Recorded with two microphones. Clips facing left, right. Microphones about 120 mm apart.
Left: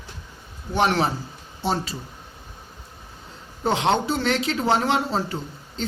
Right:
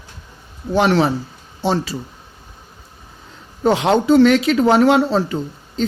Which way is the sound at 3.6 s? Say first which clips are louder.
Right 6 dB; 90° right.